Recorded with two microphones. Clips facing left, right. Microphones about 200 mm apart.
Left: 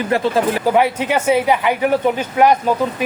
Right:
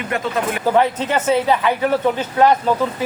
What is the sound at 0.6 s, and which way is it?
Speech, 10° left (ahead or behind).